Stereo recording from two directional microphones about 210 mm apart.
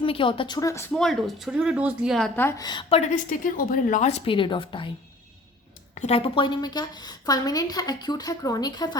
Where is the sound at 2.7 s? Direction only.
25° left (ahead or behind).